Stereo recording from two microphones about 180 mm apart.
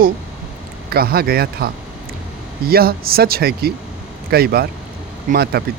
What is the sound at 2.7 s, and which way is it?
Speech, 55° right (ahead or behind).